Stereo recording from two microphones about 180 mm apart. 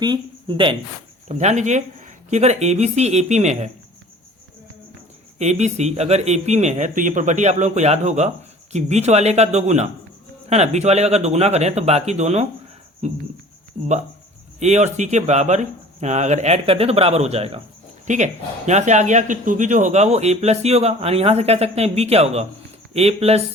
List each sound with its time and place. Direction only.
0.0 s speech: 25° right (ahead or behind)
1.3 s speech: 40° right (ahead or behind)
5.4 s speech: 40° right (ahead or behind)
14.6 s speech: 40° right (ahead or behind)